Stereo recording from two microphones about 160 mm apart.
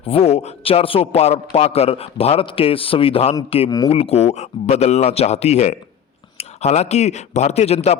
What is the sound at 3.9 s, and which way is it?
A man's voice, 40° left (ahead or behind).